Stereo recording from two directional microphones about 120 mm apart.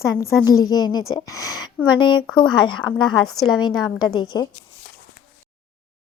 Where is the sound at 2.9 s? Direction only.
5° left (ahead or behind).